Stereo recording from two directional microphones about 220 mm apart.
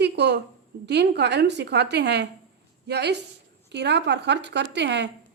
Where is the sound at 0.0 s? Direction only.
50° right (ahead or behind).